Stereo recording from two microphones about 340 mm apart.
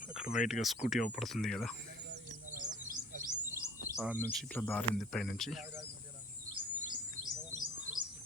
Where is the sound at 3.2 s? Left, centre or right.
Centre.